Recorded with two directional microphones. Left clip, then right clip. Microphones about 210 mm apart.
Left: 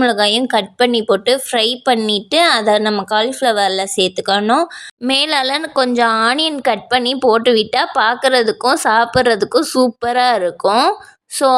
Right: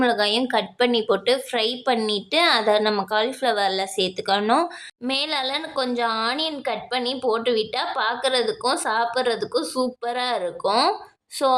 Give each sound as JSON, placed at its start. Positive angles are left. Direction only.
{"t": 0.0, "sound": "a woman's voice", "side_deg": 25}